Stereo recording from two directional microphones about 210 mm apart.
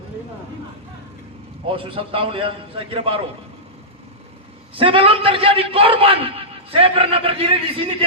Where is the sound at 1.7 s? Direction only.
25° right (ahead or behind).